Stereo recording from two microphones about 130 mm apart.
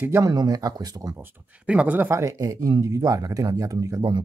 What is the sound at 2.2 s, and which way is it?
Speech, 25° right (ahead or behind).